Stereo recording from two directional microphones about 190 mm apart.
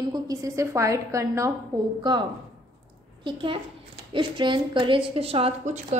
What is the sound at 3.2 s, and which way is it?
A woman's voice, 25° right (ahead or behind).